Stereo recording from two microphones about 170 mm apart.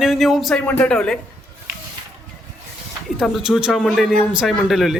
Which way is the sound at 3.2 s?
5° right (ahead or behind).